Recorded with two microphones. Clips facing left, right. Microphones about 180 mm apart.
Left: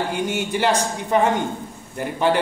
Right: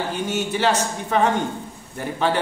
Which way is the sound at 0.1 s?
15° left (ahead or behind).